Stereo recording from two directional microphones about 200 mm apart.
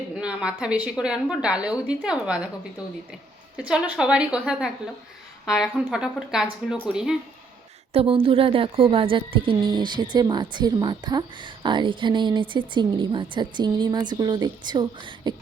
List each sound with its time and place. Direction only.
0.2 s a woman's voice: 5° right (ahead or behind)
3.7 s a woman's voice: 5° right (ahead or behind)
7.9 s speech: 30° right (ahead or behind)